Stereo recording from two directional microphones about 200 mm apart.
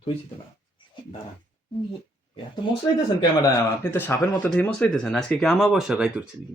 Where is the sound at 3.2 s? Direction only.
15° left (ahead or behind); by 6.2 s 5° right (ahead or behind).